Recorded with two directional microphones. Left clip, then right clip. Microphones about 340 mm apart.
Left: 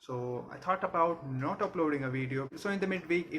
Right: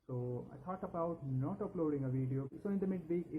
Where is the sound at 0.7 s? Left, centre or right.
Centre.